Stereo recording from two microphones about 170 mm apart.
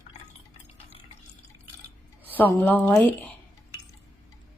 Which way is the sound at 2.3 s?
10° left (ahead or behind).